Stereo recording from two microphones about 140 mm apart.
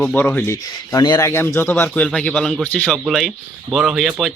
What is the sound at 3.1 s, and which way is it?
Speech, centre (ahead or behind).